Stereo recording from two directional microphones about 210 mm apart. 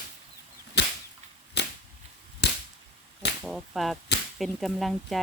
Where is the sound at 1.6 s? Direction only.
55° left (ahead or behind).